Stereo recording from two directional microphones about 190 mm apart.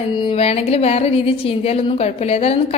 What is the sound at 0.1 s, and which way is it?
A woman's voice, 25° left (ahead or behind).